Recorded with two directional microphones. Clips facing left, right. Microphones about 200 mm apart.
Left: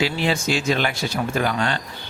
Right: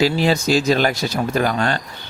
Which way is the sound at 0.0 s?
40° right (ahead or behind).